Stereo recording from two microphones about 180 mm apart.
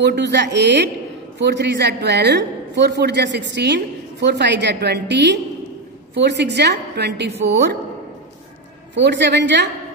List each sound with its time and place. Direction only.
0.0 s a woman's voice: 70° right (ahead or behind)
8.9 s a woman's voice: 75° right (ahead or behind)